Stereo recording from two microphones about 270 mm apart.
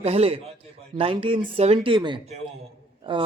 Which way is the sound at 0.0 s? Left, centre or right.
Right.